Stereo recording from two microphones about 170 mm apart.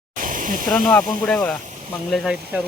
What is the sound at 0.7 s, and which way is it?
Speech, 10° left (ahead or behind).